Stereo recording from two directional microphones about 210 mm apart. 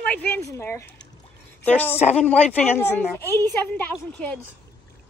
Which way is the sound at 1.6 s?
10° left (ahead or behind).